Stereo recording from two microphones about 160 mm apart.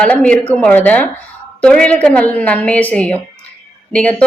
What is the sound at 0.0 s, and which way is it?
Speech, 5° left (ahead or behind).